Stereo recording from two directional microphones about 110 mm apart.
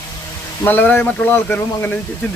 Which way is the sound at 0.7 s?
20° left (ahead or behind).